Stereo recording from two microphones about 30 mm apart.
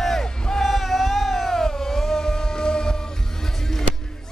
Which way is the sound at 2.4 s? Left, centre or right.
Left.